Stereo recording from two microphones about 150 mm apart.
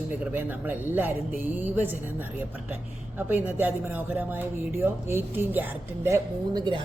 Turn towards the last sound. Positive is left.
turn(degrees=-30)  # may be behind; listen again after turning